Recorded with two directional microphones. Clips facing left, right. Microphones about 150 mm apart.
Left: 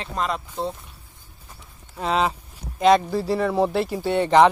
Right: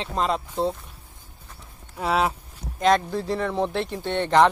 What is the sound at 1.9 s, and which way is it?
Speech, 10° right (ahead or behind).